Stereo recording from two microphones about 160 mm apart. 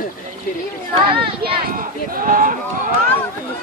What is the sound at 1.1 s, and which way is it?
Speech, 35° right (ahead or behind).